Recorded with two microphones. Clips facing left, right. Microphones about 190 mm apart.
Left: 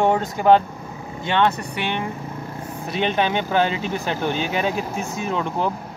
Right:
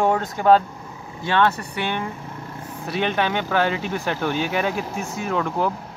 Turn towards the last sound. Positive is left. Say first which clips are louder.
# right 1 dB
turn(degrees=20)  # may be behind; listen again after turning